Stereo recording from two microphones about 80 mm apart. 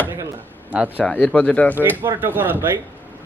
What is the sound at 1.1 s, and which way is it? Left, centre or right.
Speech, centre.